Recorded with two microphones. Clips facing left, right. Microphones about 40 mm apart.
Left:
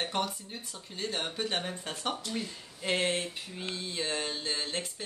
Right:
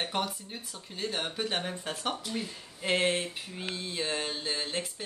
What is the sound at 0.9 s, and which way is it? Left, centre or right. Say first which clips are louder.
Speech: right 1 dB; centre.